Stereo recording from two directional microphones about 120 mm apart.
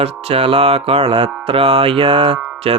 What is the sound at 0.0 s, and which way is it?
Music, 55° right (ahead or behind).